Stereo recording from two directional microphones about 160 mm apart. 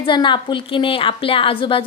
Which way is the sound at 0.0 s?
30° left (ahead or behind).